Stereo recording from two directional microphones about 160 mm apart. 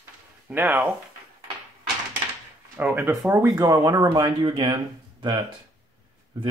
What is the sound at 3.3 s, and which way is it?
Speech, 20° right (ahead or behind).